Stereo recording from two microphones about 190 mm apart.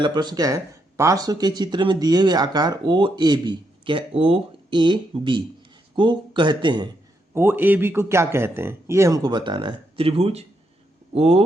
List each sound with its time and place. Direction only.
0.0 s speech: 25° right (ahead or behind)
7.3 s speech: 10° right (ahead or behind); by 11.4 s 30° right (ahead or behind)